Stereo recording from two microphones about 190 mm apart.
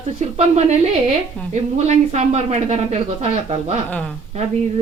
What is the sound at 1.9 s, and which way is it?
Speech, 35° right (ahead or behind).